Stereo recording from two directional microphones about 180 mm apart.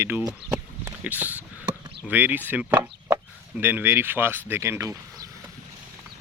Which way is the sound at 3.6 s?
10° right (ahead or behind).